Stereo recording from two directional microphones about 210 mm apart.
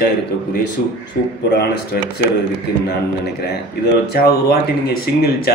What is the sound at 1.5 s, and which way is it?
Speech, 50° left (ahead or behind).